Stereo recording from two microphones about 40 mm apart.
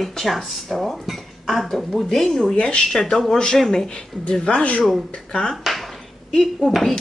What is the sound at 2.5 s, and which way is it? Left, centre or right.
Speech, left.